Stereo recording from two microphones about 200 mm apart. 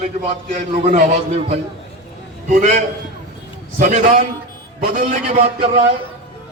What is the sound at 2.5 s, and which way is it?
A man's voice, 40° right (ahead or behind).